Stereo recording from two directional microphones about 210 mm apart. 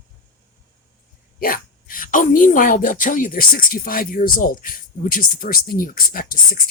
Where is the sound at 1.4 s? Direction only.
45° left (ahead or behind).